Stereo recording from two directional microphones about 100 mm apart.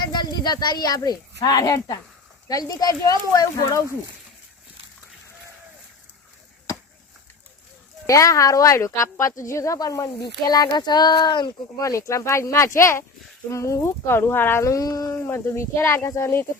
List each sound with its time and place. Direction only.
0.0 s a woman's voice: 45° left (ahead or behind)
8.0 s a woman's voice: 35° left (ahead or behind); by 11.5 s 50° left (ahead or behind)
11.8 s speech: 30° left (ahead or behind)